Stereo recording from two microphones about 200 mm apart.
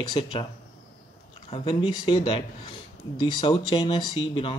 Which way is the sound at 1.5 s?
25° left (ahead or behind).